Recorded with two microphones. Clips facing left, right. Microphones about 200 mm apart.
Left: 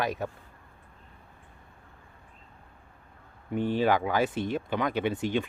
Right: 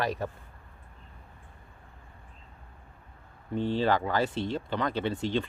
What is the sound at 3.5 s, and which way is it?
Speech, 15° left (ahead or behind).